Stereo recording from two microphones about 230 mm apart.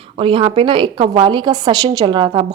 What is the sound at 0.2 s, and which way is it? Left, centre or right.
A woman's voice, right.